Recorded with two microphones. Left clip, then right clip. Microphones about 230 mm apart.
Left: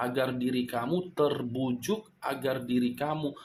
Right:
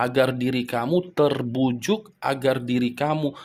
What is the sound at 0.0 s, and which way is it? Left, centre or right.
Speech, right.